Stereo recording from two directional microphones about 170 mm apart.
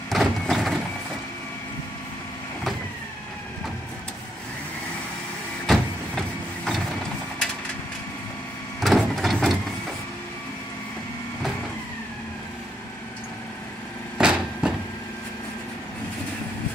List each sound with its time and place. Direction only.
0.1 s a sound: centre (ahead or behind)
5.7 s vehicle: centre (ahead or behind)
8.8 s printer: centre (ahead or behind)
14.1 s vehicle: 5° right (ahead or behind)